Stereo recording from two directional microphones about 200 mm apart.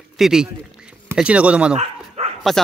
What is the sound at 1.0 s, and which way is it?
Speech, 5° right (ahead or behind).